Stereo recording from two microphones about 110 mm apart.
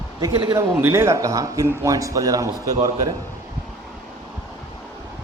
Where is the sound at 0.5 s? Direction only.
25° right (ahead or behind).